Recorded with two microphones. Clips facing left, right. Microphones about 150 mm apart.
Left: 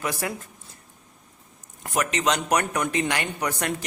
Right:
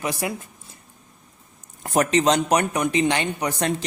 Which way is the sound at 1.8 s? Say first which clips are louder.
Right 6 dB; 35° right (ahead or behind).